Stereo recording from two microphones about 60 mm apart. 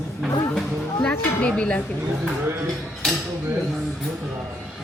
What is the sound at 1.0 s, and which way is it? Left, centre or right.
Speech, left.